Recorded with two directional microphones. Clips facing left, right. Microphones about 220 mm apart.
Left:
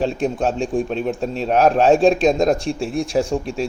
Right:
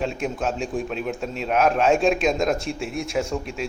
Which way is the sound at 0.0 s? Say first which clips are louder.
Left 6 dB; 30° left (ahead or behind).